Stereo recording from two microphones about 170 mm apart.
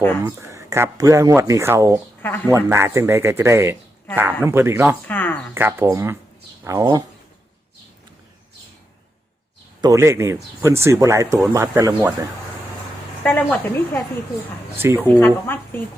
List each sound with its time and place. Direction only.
0.3 s speech: 15° right (ahead or behind)
2.2 s a woman's voice: 10° left (ahead or behind)
2.5 s speech: 15° right (ahead or behind)
5.0 s a woman's voice: 10° left (ahead or behind)
5.5 s speech: 15° right (ahead or behind)
9.8 s speech: 20° right (ahead or behind)
13.2 s a woman's voice: 10° left (ahead or behind)
14.8 s speech: 15° right (ahead or behind)
15.2 s a woman's voice: 10° left (ahead or behind)